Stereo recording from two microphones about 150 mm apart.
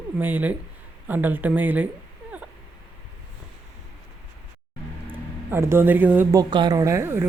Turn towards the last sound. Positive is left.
turn(degrees=-15)  # may be behind; listen again after turning